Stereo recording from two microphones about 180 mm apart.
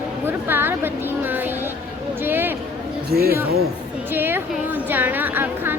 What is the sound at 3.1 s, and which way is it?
Speech, 60° right (ahead or behind).